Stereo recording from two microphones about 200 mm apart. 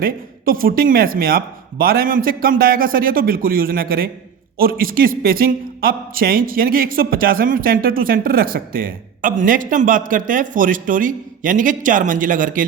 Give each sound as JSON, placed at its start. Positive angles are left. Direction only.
{"t": 0.0, "sound": "a man's voice", "side_deg": -45}